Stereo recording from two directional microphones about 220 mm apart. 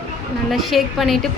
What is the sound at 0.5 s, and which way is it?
Speech, centre (ahead or behind).